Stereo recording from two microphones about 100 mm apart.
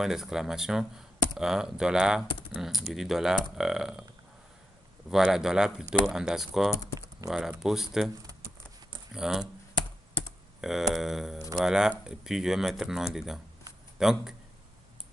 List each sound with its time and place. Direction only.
0.0 s speech: 5° right (ahead or behind)
5.1 s speech: 5° right (ahead or behind)
9.1 s speech: 5° right (ahead or behind)
10.6 s a man's voice: 5° right (ahead or behind)